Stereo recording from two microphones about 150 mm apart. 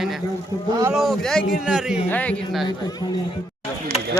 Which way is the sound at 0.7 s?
25° right (ahead or behind).